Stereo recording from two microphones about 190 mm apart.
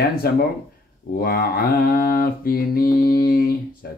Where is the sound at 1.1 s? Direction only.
50° left (ahead or behind).